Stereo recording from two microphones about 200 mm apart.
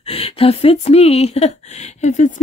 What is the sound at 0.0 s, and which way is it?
Speech, 30° left (ahead or behind).